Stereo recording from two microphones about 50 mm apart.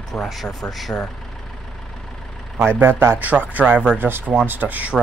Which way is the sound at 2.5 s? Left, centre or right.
Right.